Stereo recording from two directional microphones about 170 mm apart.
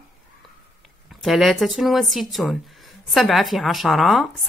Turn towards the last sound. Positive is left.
turn(degrees=0)  # may be behind; listen again after turning